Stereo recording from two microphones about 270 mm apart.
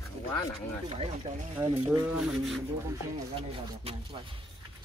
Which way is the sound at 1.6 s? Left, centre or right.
Centre.